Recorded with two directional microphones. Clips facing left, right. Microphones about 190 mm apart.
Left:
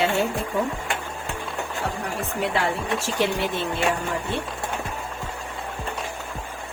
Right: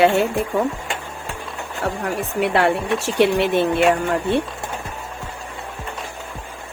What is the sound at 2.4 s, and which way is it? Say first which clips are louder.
Speech: right 7 dB; 70° right (ahead or behind).